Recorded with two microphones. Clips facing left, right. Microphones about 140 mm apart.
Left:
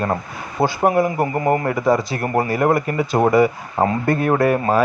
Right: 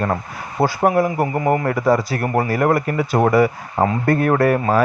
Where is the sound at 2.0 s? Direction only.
20° left (ahead or behind).